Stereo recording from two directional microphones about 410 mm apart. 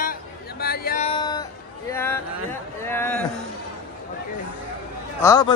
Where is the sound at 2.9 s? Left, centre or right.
Centre.